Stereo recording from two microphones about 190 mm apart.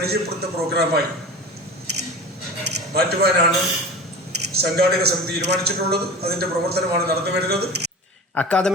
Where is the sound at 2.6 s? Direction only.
60° right (ahead or behind).